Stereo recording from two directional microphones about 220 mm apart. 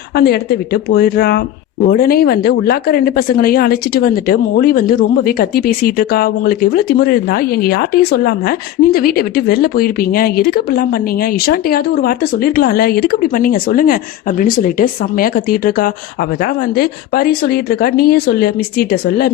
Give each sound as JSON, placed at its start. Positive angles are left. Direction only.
{"t": 0.2, "sound": "speech", "side_deg": 45}